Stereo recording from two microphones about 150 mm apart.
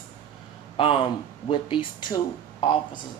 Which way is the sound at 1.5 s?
35° left (ahead or behind).